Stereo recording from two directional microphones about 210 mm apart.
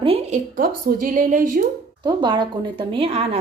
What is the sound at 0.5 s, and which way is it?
A woman's voice, 45° right (ahead or behind).